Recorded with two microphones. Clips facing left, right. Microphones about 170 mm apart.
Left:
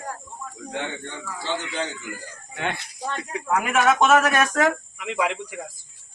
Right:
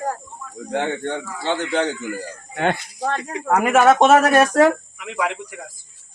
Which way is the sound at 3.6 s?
40° right (ahead or behind).